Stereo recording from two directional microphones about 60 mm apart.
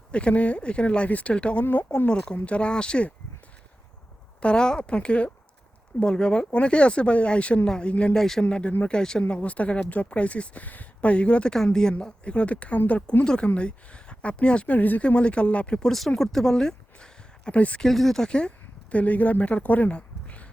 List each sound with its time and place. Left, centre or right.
0.1 s speech: centre
1.6 s speech: left
2.0 s speech: centre
4.4 s speech: centre
8.2 s a woman's voice: centre
8.4 s a woman's voice: centre
9.2 s a woman's voice: left
17.8 s speech: centre; by 20.5 s left